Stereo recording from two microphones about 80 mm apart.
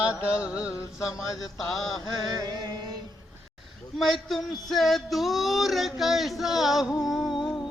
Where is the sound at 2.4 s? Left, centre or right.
Right.